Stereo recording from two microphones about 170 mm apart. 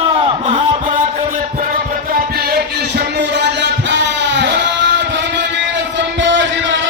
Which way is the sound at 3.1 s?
90° right.